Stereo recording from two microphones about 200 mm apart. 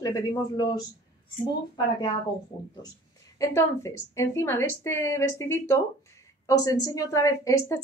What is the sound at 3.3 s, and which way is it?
Speech, 15° left (ahead or behind).